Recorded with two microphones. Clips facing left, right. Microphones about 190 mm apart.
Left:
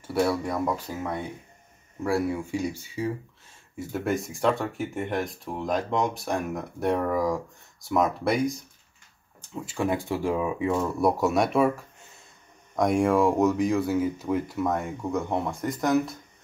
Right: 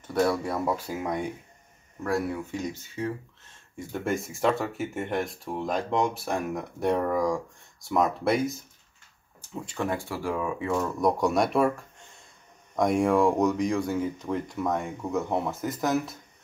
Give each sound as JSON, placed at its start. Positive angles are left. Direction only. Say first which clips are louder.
{"t": 0.0, "sound": "speech", "louder": "even", "side_deg": 5}
{"t": 2.0, "sound": "speech", "louder": "left 2 dB", "side_deg": 10}
{"t": 9.7, "sound": "speech", "louder": "left 4 dB", "side_deg": 10}
{"t": 10.7, "sound": "speech", "louder": "even", "side_deg": 10}